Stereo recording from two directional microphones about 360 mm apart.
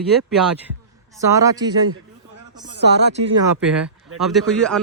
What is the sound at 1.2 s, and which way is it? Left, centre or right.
Speech, centre.